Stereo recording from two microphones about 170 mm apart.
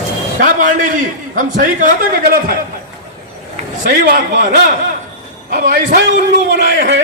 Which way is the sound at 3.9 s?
70° right (ahead or behind).